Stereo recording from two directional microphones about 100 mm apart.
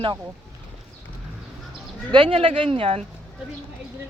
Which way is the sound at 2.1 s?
55° right (ahead or behind).